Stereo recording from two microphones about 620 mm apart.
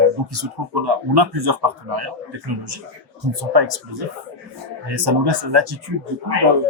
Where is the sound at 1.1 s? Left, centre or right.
Right.